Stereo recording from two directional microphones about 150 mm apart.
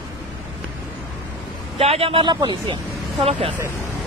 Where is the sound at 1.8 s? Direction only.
40° right (ahead or behind).